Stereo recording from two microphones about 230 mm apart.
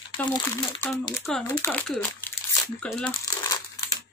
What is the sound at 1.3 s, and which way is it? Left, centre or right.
Speech, centre.